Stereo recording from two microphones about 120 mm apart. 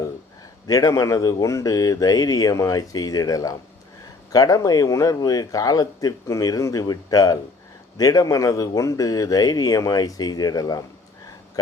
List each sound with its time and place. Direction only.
0.7 s a man's voice: 30° left (ahead or behind)